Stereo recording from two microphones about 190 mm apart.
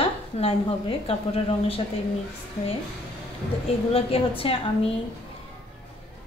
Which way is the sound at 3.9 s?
30° left (ahead or behind).